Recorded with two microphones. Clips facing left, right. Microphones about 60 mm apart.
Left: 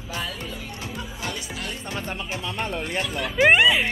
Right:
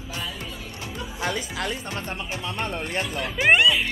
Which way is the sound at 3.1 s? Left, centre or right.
Centre.